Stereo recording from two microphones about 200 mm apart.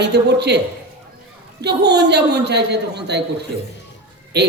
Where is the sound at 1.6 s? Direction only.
55° right (ahead or behind).